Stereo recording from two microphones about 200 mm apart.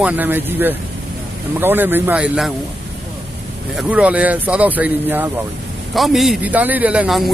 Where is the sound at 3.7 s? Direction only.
5° right (ahead or behind).